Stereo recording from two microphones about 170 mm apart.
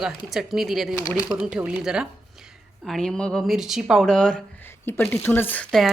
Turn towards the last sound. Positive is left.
turn(degrees=5)  # may be behind; listen again after turning